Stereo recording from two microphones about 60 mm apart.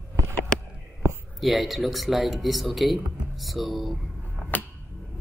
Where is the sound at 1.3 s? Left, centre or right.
Centre.